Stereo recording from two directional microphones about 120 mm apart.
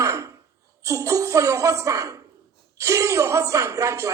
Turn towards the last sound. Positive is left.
turn(degrees=-25)  # may be behind; listen again after turning